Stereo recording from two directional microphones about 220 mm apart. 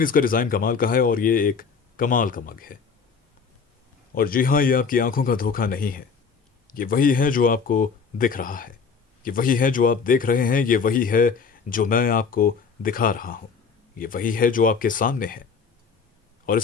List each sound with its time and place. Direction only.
0.0 s speech: 40° left (ahead or behind)
4.1 s speech: 40° left (ahead or behind)
16.5 s speech: 40° left (ahead or behind)